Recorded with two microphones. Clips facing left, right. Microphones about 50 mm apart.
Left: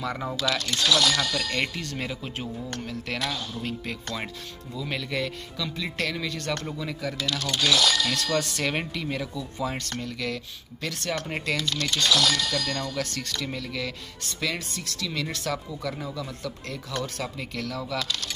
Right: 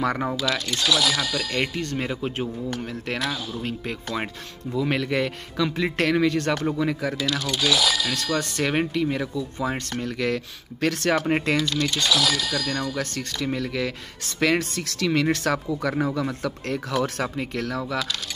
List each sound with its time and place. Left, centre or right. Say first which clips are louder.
0.0 s speech: right 6 dB; right
0.3 s speech: right 2 dB; centre
1.8 s speech: right 6 dB; right
3.6 s speech: right 3 dB; right
4.7 s speech: right 7 dB; right
7.2 s speech: right 3 dB; centre
8.2 s speech: right 2 dB; centre
10.0 s speech: right 6 dB; right
11.2 s speech: right 7 dB; right
11.5 s speech: right 4 dB; centre
13.0 s speech: right 3 dB; right
14.4 s speech: right 9 dB; right
17.4 s speech: right 5 dB; right